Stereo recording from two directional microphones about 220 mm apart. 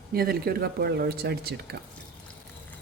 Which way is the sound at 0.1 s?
45° right (ahead or behind).